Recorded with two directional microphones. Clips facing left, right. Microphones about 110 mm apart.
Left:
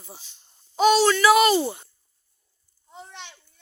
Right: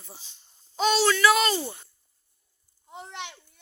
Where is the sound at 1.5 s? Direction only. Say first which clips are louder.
Left 7 dB; 15° left (ahead or behind).